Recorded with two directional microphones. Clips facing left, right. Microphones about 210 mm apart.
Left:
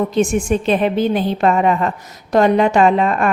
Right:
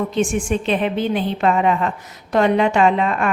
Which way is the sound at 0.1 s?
40° left (ahead or behind).